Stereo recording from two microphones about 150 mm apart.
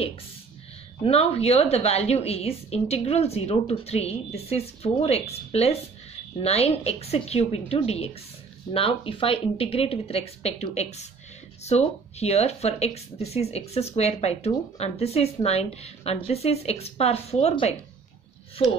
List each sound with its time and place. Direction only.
1.0 s a woman's voice: 40° left (ahead or behind)